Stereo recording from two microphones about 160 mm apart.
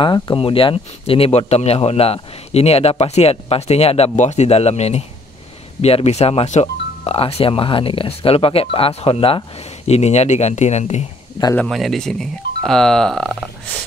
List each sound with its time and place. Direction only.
0.0 s speech: 30° left (ahead or behind); by 11.1 s 45° left (ahead or behind)
11.5 s speech: 5° left (ahead or behind)